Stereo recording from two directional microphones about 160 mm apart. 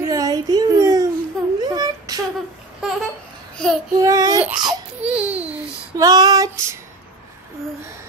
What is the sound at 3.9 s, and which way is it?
Speech, 25° right (ahead or behind).